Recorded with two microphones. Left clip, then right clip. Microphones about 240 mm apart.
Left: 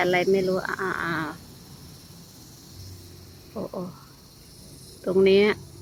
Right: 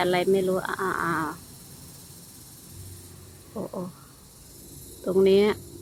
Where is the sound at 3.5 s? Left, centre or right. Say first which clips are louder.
Left 1 dB; centre.